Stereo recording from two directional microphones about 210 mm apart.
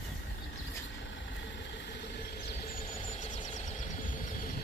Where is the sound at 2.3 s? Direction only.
40° left (ahead or behind).